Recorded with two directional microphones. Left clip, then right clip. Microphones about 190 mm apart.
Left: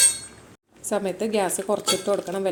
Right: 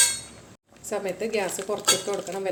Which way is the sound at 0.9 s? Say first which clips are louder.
Left 3 dB; 35° left (ahead or behind).